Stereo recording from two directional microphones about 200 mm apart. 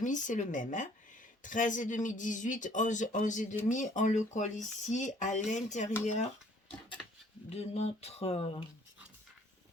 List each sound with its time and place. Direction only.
0.0 s speech: 40° left (ahead or behind)
7.5 s speech: 30° left (ahead or behind)